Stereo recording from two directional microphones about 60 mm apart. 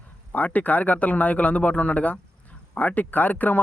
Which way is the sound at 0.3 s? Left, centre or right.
Left.